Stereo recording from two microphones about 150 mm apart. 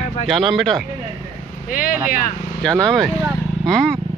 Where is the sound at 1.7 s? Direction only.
70° left (ahead or behind).